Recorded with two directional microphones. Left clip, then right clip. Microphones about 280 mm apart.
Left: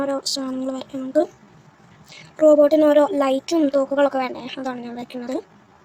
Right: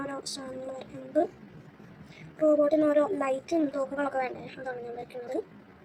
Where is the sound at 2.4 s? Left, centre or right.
Left.